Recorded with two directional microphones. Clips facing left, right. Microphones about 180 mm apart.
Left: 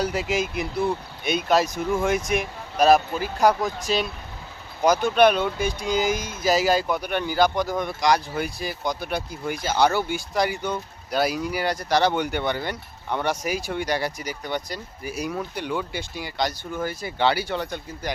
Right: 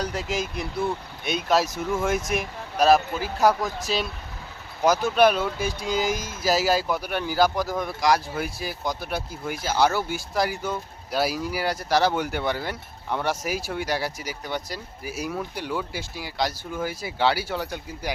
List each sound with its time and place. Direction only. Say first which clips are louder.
0.0 s speech: left 3 dB; 5° left (ahead or behind)